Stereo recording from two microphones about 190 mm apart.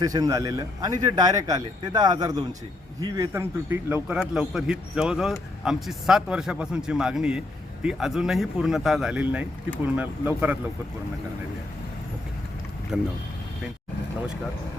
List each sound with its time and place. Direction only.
0.0 s speech: 20° right (ahead or behind)
12.9 s speech: centre (ahead or behind)